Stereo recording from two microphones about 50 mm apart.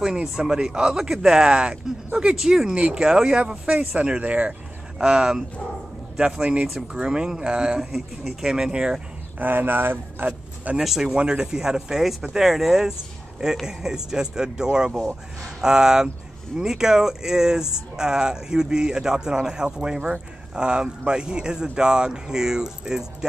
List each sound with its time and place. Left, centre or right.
0.0 s speech: centre
9.4 s speech: right
10.2 s speech: right
10.8 s speech: centre
11.1 s speech: centre